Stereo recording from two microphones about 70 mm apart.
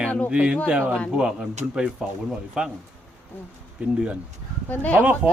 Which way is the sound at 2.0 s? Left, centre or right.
Centre.